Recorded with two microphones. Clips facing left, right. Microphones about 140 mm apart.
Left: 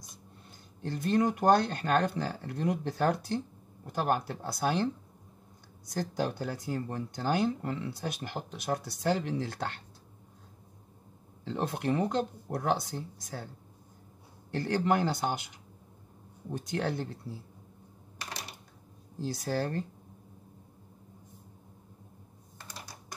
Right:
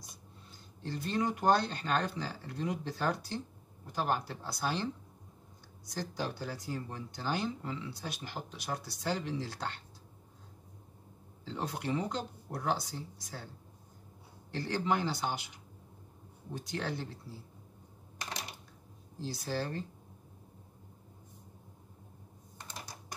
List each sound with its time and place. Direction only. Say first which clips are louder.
0.8 s speech: left 6 dB; 55° left (ahead or behind)
5.9 s speech: left 5 dB; 50° left (ahead or behind)
11.4 s speech: left 5 dB; 55° left (ahead or behind)
14.5 s speech: left 4 dB; 50° left (ahead or behind)
16.5 s speech: left 5 dB; 50° left (ahead or behind)
19.2 s speech: left 4 dB; 50° left (ahead or behind)